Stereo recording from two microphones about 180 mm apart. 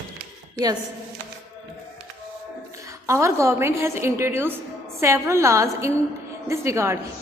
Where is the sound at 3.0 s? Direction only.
15° right (ahead or behind).